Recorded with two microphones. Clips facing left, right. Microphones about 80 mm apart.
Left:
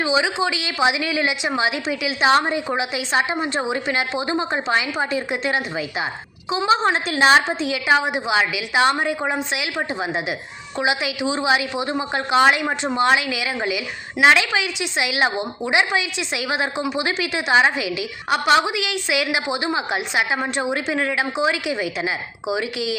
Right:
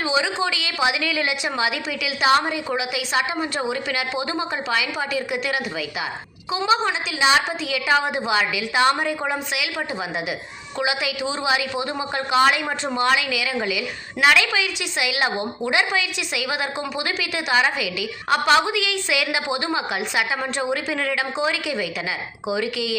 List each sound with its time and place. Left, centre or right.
0.0 s a woman's voice: centre
6.8 s a woman's voice: left
7.6 s a woman's voice: left